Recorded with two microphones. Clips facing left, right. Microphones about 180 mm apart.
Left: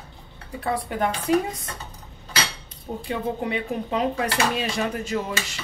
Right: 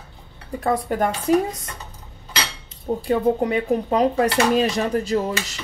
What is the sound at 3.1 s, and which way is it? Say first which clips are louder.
Speech: right 7 dB; 40° right (ahead or behind).